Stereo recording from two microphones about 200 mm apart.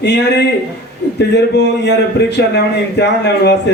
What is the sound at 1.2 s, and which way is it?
A man's voice, 60° left (ahead or behind).